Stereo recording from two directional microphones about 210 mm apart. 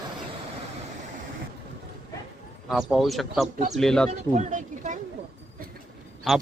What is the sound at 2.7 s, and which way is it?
Speech, centre (ahead or behind).